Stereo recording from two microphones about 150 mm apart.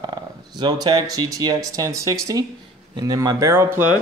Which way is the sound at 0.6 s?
30° right (ahead or behind).